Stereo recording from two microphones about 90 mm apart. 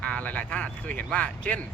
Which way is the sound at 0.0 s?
15° left (ahead or behind).